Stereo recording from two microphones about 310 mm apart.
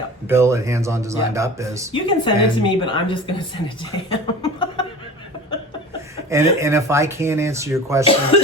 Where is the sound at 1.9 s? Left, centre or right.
Centre.